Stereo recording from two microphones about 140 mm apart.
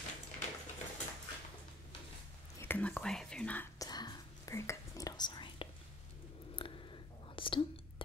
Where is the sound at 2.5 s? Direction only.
15° left (ahead or behind).